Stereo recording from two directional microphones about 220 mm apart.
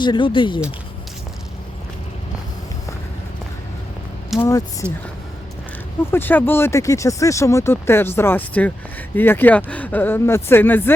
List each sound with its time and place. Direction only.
0.0 s speech: 20° left (ahead or behind)
4.4 s speech: 15° left (ahead or behind)
6.1 s speech: 10° left (ahead or behind)